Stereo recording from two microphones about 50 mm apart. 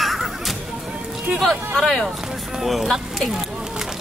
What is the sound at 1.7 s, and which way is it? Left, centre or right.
Speech, centre.